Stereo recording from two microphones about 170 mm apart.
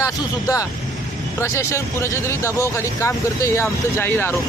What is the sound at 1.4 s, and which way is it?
Speech, 15° left (ahead or behind).